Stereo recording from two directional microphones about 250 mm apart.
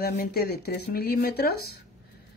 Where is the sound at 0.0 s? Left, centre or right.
Left.